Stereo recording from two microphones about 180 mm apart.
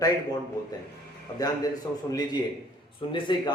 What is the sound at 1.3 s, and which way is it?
Speech, 20° left (ahead or behind).